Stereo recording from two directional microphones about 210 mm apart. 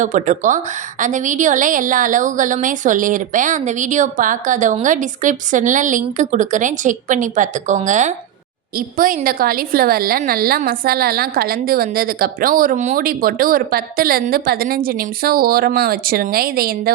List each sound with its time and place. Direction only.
0.0 s a woman's voice: 35° right (ahead or behind)